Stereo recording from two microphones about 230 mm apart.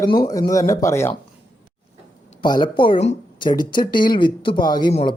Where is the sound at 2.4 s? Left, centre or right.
Centre.